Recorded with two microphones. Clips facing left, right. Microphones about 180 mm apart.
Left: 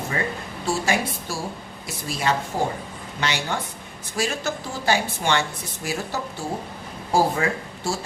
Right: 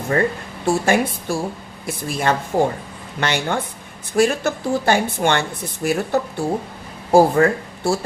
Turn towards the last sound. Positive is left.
turn(degrees=-55)  # may be behind; listen again after turning